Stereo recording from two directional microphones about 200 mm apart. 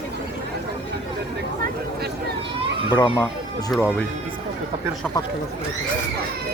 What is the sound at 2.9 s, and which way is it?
Speech, 20° left (ahead or behind).